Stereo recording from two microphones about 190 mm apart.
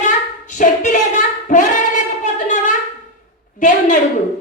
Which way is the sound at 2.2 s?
40° left (ahead or behind).